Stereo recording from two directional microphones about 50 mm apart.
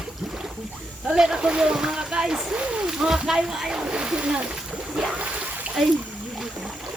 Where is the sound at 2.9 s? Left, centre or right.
Centre.